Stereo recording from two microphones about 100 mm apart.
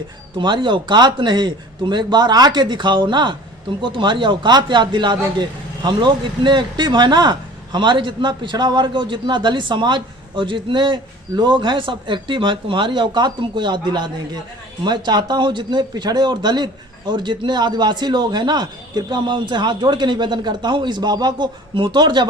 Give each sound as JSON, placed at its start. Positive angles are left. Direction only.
{"t": 0.3, "sound": "a man's voice", "side_deg": -50}